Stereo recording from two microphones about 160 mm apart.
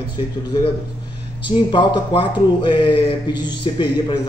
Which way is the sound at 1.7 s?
30° left (ahead or behind).